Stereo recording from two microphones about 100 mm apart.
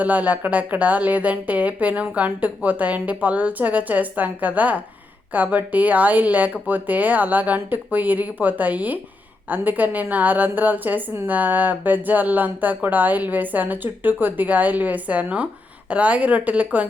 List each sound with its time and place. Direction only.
0.0 s a woman's voice: 15° right (ahead or behind)